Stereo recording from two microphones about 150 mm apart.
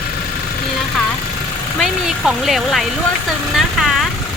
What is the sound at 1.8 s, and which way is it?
Speech, 5° right (ahead or behind).